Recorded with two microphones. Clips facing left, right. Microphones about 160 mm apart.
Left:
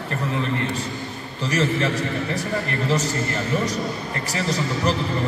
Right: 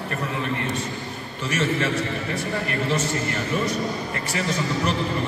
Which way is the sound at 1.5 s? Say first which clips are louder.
Left 2 dB; 35° left (ahead or behind).